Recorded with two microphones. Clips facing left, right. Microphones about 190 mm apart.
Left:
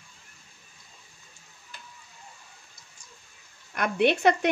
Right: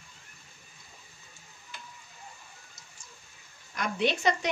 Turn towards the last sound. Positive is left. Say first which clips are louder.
# left 5 dB
turn(degrees=60)  # may be behind; listen again after turning